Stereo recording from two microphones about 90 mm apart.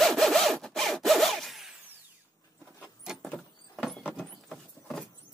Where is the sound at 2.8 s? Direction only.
5° right (ahead or behind).